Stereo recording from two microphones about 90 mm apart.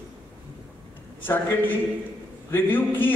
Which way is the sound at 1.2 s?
20° left (ahead or behind).